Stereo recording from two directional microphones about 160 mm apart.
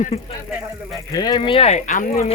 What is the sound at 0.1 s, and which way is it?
Speech, 40° left (ahead or behind).